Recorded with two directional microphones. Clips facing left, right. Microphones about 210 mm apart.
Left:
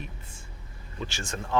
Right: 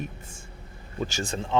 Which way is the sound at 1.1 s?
40° right (ahead or behind).